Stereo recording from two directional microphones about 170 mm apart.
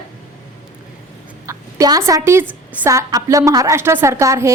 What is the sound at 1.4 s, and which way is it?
A woman's voice, 20° right (ahead or behind).